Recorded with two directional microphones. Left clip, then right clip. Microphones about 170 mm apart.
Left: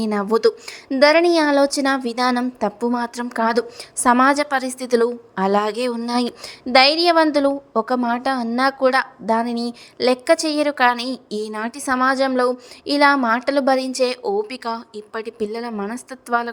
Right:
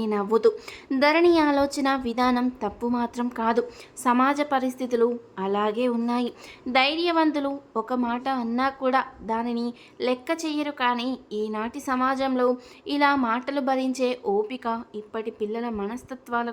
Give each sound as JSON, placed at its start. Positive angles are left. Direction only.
{"t": 0.0, "sound": "a woman's voice", "side_deg": 25}